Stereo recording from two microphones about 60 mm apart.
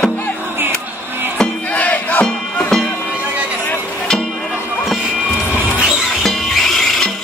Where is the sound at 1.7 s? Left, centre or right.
Left.